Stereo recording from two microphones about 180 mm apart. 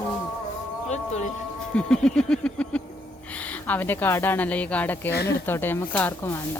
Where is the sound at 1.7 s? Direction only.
5° left (ahead or behind).